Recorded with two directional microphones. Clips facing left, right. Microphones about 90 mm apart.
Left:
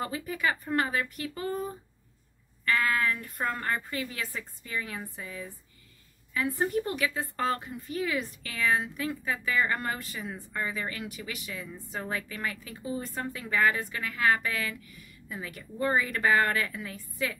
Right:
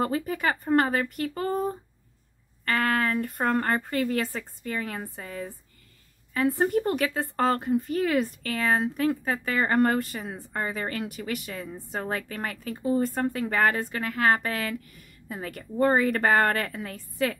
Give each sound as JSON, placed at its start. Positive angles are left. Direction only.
{"t": 0.0, "sound": "a woman's voice", "side_deg": -45}